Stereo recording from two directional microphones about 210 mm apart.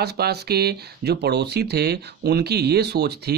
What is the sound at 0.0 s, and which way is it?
Speech, 50° right (ahead or behind).